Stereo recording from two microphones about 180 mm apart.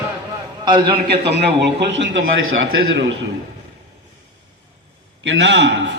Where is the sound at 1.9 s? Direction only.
90° right.